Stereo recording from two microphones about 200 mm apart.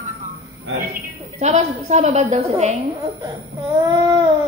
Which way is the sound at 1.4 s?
35° right (ahead or behind).